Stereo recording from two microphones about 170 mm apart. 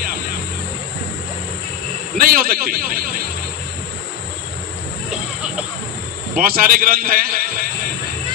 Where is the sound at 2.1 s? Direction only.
60° right (ahead or behind).